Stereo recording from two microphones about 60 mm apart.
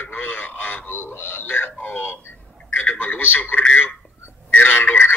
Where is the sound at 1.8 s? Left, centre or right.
Left.